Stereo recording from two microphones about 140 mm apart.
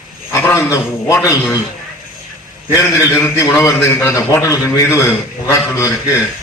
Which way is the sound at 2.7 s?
20° left (ahead or behind).